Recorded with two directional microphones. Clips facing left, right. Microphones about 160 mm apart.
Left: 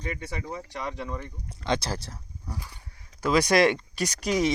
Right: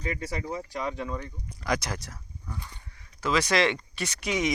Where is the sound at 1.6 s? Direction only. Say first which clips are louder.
Left 2 dB; 30° left (ahead or behind).